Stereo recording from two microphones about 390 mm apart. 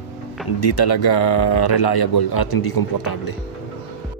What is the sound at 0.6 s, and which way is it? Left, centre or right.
Speech, left.